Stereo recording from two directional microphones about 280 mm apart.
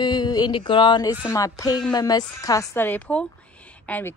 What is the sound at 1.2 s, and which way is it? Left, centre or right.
Speech, centre.